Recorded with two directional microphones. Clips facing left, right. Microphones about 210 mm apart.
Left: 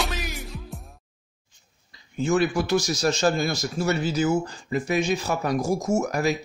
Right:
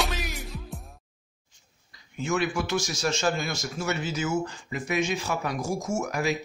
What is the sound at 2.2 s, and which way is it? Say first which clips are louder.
A man's voice: left 5 dB; 35° left (ahead or behind).